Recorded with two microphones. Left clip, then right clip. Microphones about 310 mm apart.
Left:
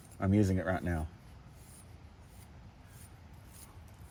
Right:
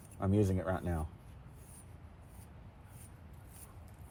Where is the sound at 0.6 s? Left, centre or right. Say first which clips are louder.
Left 3 dB; left.